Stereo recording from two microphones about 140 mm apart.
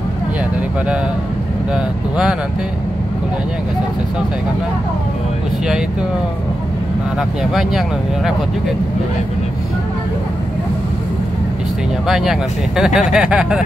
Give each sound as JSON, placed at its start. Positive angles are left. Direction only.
{"t": 12.1, "sound": "speech", "side_deg": 0}